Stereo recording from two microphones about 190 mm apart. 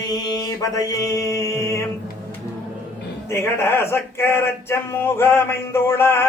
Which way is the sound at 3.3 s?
15° left (ahead or behind).